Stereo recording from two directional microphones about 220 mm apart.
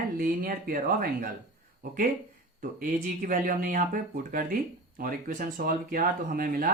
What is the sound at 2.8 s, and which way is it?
Speech, 40° right (ahead or behind).